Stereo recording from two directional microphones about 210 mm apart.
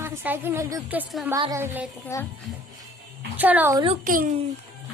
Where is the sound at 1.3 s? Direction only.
15° right (ahead or behind).